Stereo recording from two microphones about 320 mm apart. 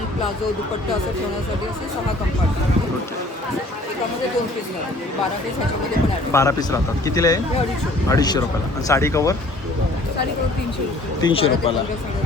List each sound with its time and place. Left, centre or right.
6.3 s speech: centre
11.2 s speech: centre